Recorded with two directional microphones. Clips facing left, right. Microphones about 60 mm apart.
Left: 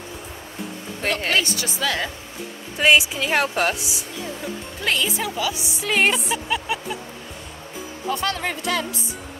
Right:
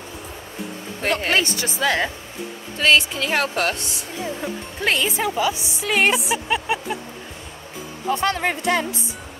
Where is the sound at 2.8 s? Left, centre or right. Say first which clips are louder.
Left 1 dB; centre.